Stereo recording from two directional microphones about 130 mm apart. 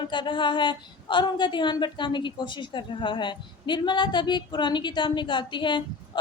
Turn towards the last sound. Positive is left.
turn(degrees=35)  # may be behind; listen again after turning